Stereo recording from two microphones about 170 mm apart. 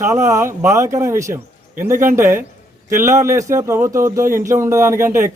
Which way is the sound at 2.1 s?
15° right (ahead or behind).